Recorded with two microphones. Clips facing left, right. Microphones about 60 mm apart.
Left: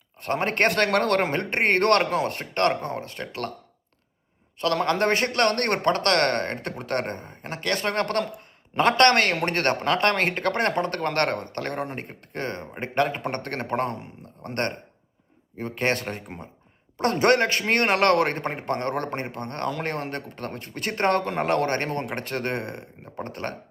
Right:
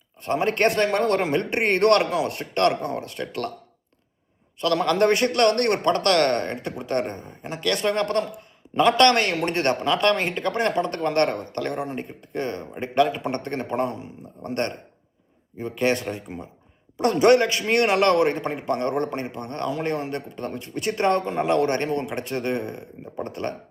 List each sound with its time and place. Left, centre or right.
0.2 s a man's voice: left
1.3 s a man's voice: left
4.6 s a man's voice: left